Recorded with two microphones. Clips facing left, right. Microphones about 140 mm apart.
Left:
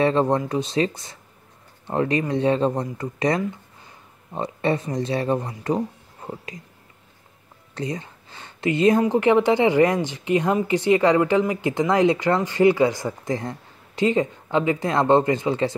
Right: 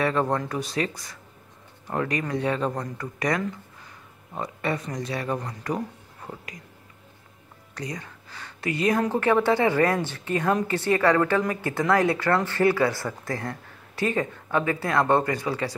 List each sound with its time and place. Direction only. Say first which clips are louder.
0.0 s speech: left 5 dB; 25° left (ahead or behind)
7.7 s speech: left 6 dB; 25° left (ahead or behind)